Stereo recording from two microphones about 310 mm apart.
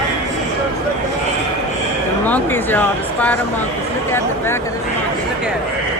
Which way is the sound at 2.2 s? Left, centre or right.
Centre.